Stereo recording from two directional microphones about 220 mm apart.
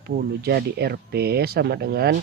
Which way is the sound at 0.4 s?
45° right (ahead or behind).